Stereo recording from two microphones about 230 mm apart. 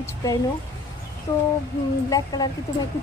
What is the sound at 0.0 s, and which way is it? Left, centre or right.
A woman's voice, centre.